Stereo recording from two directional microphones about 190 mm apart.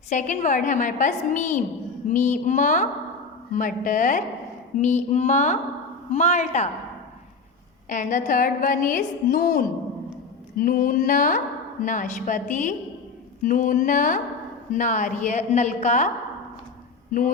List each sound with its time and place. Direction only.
0.1 s a woman's voice: 40° left (ahead or behind)
7.9 s a woman's voice: 40° left (ahead or behind)